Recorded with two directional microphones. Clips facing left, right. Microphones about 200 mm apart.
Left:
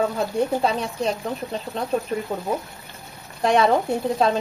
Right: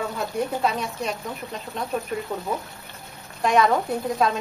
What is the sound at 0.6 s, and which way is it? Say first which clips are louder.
Speech: left 3 dB; 30° left (ahead or behind).